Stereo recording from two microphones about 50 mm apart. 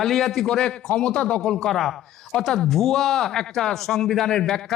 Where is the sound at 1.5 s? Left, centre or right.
Centre.